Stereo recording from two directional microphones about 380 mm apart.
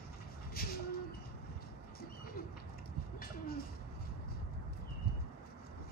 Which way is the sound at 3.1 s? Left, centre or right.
Left.